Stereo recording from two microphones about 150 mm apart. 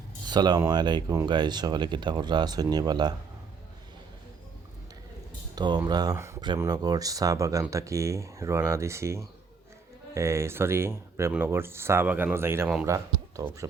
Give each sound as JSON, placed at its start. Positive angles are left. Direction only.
{"t": 0.3, "sound": "speech", "side_deg": -30}
{"t": 5.5, "sound": "speech", "side_deg": -30}